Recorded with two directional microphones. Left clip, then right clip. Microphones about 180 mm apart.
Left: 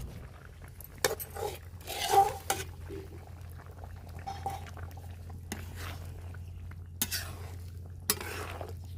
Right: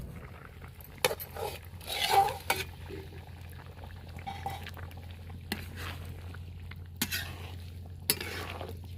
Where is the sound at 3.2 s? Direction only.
5° left (ahead or behind).